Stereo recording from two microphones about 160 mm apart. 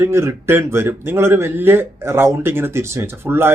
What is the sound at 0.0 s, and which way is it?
Speech, 15° right (ahead or behind).